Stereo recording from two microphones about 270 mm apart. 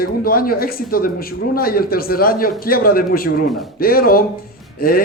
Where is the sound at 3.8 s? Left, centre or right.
Left.